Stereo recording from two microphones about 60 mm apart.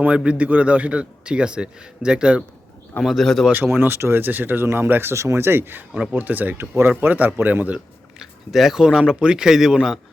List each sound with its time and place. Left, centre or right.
0.3 s a man's voice: right
3.0 s speech: centre
3.5 s speech: right
5.2 s speech: right
5.9 s a man's voice: centre
6.1 s speech: right
8.2 s a man's voice: centre